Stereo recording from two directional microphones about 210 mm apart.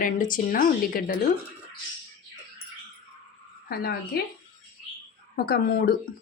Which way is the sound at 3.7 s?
45° left (ahead or behind).